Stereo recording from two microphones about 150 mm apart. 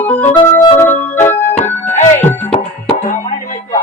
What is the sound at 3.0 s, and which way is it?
Music, 50° left (ahead or behind).